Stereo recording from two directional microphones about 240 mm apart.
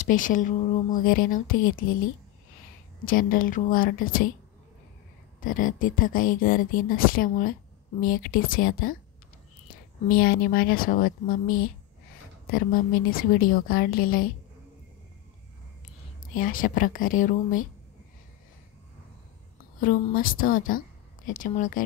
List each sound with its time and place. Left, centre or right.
0.0 s speech: left
3.1 s speech: left
5.4 s speech: left
10.0 s speech: left
16.3 s speech: left
19.8 s speech: left